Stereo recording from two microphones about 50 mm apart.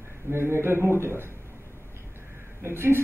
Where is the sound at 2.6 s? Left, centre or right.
Right.